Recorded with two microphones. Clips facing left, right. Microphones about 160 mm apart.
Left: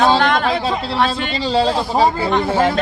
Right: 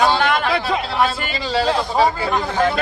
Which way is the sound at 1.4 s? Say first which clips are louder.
Left 2 dB; 30° left (ahead or behind).